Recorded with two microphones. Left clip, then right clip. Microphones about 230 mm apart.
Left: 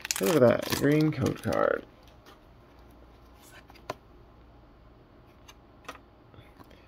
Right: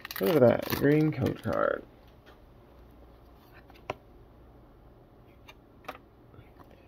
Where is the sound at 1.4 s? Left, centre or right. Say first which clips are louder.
Left 2 dB; left.